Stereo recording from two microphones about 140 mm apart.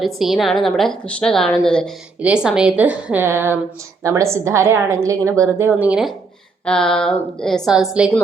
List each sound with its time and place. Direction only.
0.0 s a woman's voice: centre (ahead or behind)